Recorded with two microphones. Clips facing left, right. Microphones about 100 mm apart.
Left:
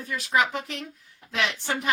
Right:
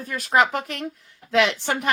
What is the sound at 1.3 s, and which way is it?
Speech, 85° right.